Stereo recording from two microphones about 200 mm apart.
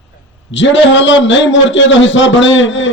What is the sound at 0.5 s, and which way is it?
A man's voice, 65° left (ahead or behind).